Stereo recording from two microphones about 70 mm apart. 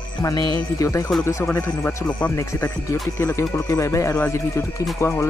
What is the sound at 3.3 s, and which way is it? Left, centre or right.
Speech, left.